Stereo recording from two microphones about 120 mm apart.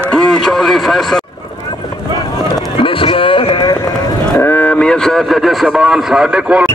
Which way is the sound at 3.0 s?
45° left (ahead or behind).